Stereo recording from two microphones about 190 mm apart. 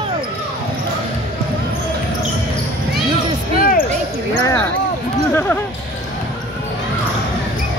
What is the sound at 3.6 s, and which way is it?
Basketball bounce, 50° left (ahead or behind).